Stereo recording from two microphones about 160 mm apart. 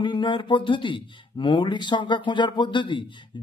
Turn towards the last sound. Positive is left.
turn(degrees=30)  # may be behind; listen again after turning